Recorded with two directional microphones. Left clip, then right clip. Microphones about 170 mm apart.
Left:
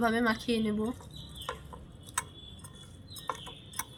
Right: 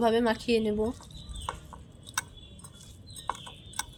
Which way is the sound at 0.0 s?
40° right (ahead or behind).